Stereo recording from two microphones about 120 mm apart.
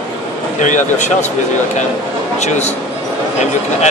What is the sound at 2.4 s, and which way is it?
Speech, 70° left (ahead or behind).